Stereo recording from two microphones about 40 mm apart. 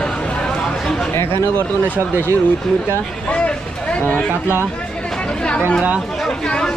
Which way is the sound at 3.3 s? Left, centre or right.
Left.